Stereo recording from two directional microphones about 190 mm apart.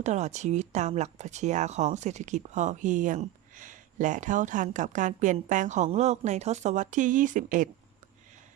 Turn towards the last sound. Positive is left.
turn(degrees=-40)  # may be behind; listen again after turning